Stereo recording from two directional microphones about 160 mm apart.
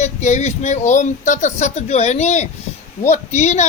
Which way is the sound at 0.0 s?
45° left (ahead or behind).